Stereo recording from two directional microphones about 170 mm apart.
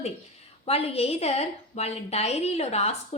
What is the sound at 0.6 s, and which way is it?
A woman's voice, 35° left (ahead or behind).